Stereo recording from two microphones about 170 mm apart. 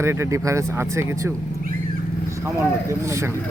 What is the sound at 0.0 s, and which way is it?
A man's voice, 15° right (ahead or behind).